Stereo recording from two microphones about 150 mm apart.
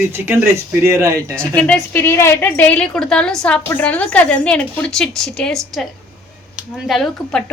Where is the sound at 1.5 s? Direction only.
10° left (ahead or behind).